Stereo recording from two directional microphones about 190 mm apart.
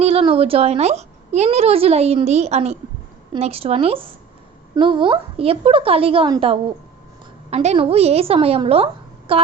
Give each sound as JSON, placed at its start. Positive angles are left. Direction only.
{"t": 0.0, "sound": "a child's voice", "side_deg": -30}